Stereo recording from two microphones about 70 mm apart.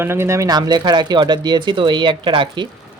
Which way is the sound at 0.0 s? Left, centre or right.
Right.